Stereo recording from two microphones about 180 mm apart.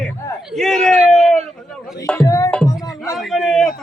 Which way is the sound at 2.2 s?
20° left (ahead or behind).